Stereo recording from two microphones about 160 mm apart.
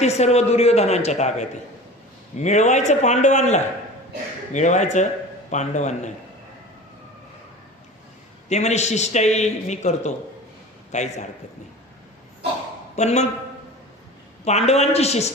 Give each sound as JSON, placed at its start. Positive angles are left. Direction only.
{"t": 0.0, "sound": "a man's voice", "side_deg": 45}
{"t": 8.4, "sound": "a man's voice", "side_deg": 45}
{"t": 13.0, "sound": "a man's voice", "side_deg": 45}
{"t": 14.4, "sound": "a man's voice", "side_deg": 45}